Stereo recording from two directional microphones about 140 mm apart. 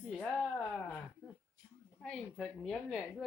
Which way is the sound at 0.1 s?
5° left (ahead or behind).